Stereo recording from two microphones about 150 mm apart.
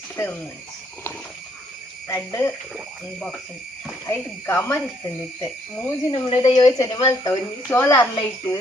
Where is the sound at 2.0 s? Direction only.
20° left (ahead or behind).